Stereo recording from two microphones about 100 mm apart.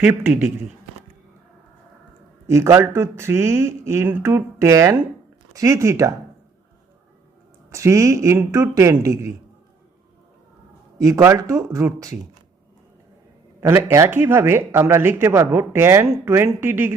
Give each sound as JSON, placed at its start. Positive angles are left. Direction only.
{"t": 0.0, "sound": "speech", "side_deg": -15}
{"t": 2.5, "sound": "speech", "side_deg": -30}
{"t": 7.7, "sound": "speech", "side_deg": -30}
{"t": 10.9, "sound": "a man's voice", "side_deg": -35}
{"t": 13.6, "sound": "speech", "side_deg": -30}